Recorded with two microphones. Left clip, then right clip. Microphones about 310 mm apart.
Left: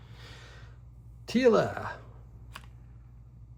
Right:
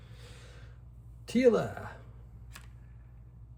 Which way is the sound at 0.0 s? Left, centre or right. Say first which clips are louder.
Left 4 dB; left.